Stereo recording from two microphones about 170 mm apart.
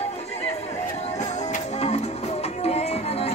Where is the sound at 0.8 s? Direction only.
45° left (ahead or behind).